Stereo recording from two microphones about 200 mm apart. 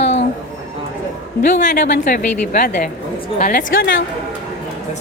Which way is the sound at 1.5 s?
40° left (ahead or behind).